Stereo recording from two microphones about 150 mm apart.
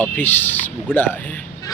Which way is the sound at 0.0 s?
10° left (ahead or behind).